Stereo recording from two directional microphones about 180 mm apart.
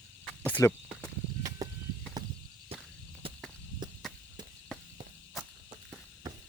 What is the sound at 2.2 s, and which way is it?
Walk, 20° right (ahead or behind).